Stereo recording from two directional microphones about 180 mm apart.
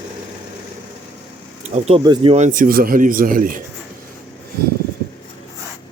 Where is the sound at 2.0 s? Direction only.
25° right (ahead or behind); by 3.6 s 50° right (ahead or behind).